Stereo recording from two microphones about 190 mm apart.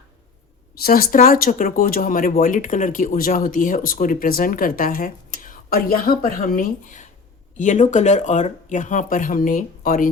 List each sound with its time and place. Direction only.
0.8 s speech: 50° left (ahead or behind)